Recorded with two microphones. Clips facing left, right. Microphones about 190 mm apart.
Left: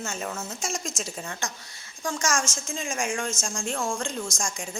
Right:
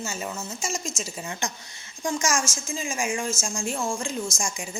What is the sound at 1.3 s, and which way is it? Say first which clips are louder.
A woman's voice: right 2 dB; 15° right (ahead or behind).